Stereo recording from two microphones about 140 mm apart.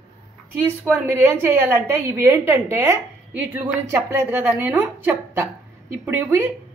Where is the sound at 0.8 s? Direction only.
15° right (ahead or behind).